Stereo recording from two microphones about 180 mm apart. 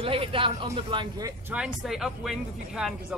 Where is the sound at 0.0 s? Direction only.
30° right (ahead or behind).